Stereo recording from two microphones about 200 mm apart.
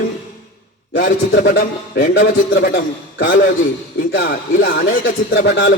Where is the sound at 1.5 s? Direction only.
55° left (ahead or behind).